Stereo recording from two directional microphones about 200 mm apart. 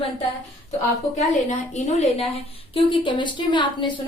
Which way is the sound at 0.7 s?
35° left (ahead or behind).